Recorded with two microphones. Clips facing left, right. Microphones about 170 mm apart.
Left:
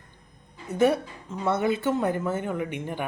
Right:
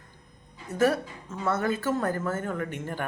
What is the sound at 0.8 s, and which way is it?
Speech, 15° left (ahead or behind).